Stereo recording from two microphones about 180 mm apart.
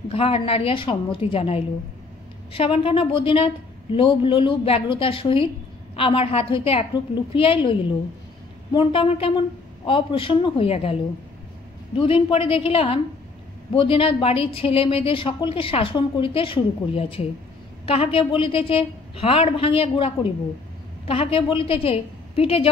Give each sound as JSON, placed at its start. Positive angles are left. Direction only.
{"t": 0.1, "sound": "a woman's voice", "side_deg": 30}
{"t": 8.7, "sound": "a woman's voice", "side_deg": 30}
{"t": 12.0, "sound": "a woman's voice", "side_deg": 30}
{"t": 21.1, "sound": "a woman's voice", "side_deg": 30}